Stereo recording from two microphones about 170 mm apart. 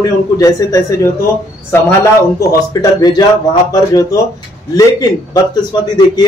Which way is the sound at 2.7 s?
25° left (ahead or behind).